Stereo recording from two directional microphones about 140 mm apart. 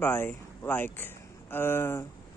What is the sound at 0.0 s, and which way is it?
Speech, 15° left (ahead or behind).